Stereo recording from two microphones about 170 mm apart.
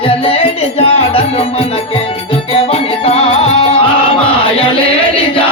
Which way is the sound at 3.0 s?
35° left (ahead or behind).